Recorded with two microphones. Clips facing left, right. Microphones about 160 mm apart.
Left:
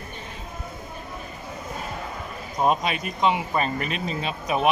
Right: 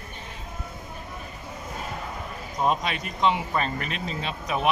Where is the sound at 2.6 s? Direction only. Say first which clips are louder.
Left 3 dB; 15° left (ahead or behind).